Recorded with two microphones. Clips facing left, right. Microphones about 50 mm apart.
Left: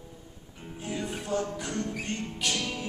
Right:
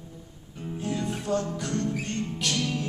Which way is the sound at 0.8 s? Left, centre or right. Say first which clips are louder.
Right 4 dB; centre.